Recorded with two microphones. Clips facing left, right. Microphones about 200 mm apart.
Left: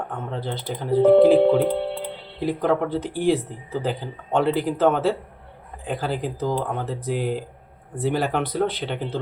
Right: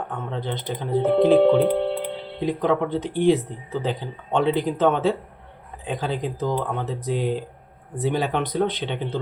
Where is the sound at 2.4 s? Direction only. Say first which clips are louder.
Even; 5° left (ahead or behind).